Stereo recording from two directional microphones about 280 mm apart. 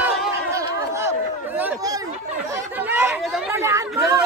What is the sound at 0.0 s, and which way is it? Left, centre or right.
Chatter, centre.